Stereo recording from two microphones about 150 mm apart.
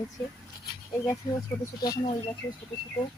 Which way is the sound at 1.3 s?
25° left (ahead or behind).